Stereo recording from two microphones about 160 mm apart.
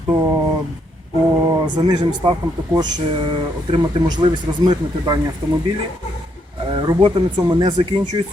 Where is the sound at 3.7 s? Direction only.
30° right (ahead or behind).